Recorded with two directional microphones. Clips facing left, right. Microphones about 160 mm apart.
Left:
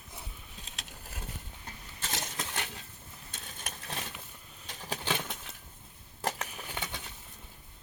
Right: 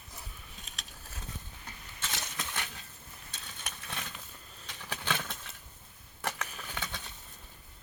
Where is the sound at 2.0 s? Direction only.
40° left (ahead or behind).